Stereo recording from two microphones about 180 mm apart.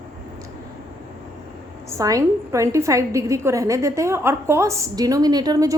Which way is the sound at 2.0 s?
20° right (ahead or behind).